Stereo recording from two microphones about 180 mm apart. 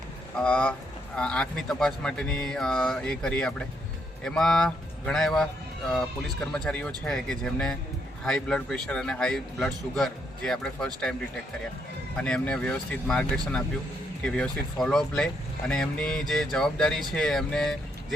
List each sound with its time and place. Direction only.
0.3 s speech: 5° left (ahead or behind)
12.1 s speech: 5° left (ahead or behind)